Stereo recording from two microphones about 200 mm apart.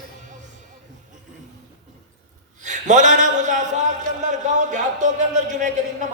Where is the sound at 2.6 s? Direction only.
40° right (ahead or behind).